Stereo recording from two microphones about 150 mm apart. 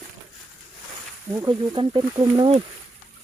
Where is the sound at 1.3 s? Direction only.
30° right (ahead or behind).